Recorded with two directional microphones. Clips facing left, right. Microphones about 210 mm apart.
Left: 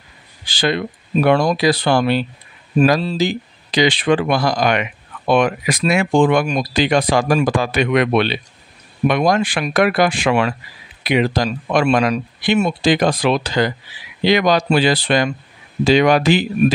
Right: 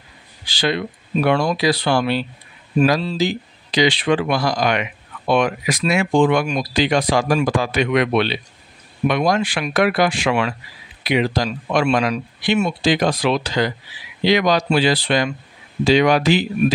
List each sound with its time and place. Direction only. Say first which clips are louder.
0.5 s speech: left 2 dB; 50° left (ahead or behind)